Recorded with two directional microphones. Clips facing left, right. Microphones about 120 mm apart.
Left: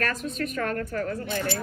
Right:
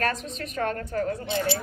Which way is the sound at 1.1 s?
50° left (ahead or behind).